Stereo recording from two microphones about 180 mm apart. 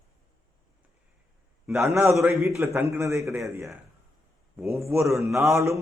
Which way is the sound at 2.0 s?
10° right (ahead or behind).